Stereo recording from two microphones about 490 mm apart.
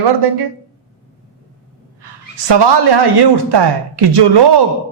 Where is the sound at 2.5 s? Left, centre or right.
Right.